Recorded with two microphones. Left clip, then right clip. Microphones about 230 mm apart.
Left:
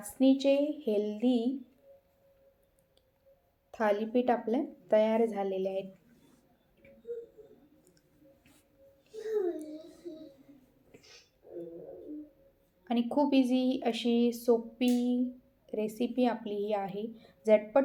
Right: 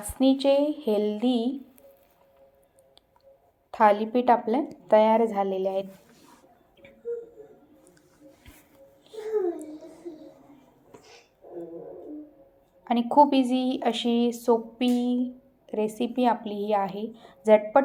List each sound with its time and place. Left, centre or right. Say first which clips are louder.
0.2 s a woman's voice: right 5 dB; centre
3.7 s a woman's voice: right 9 dB; centre
12.8 s a woman's voice: right 11 dB; centre